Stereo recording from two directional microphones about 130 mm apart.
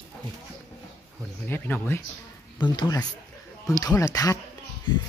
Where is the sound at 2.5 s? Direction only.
35° left (ahead or behind).